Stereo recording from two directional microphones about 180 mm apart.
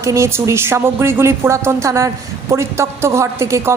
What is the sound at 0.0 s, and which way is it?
A woman's voice, 15° right (ahead or behind).